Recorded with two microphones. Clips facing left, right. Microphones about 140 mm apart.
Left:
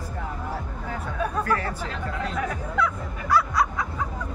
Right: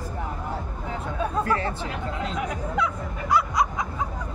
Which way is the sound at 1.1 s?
25° right (ahead or behind).